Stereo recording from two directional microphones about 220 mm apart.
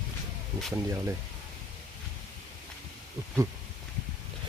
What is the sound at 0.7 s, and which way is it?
Speech, 10° right (ahead or behind).